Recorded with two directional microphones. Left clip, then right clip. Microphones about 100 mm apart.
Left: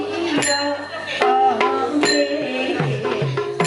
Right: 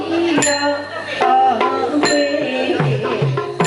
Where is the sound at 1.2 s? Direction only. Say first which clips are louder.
Right 3 dB; 30° left (ahead or behind).